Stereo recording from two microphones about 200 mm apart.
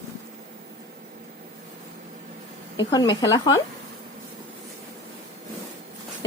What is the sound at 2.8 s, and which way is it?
Speech, 20° left (ahead or behind).